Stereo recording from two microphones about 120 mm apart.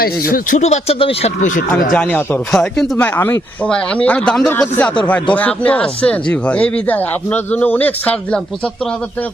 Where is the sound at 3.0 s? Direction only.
15° left (ahead or behind).